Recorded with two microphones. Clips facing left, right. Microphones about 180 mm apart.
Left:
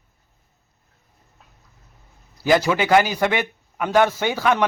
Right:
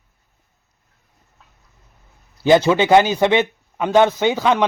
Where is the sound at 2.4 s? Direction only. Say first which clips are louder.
Right 5 dB; 25° right (ahead or behind).